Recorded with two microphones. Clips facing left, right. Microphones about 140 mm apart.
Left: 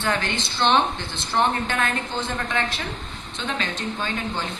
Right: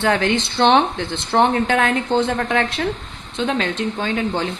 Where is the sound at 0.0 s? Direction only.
90° right.